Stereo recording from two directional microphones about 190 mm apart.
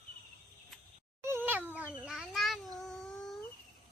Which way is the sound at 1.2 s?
10° right (ahead or behind).